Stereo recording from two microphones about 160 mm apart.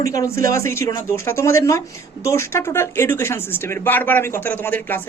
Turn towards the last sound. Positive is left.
turn(degrees=10)  # may be behind; listen again after turning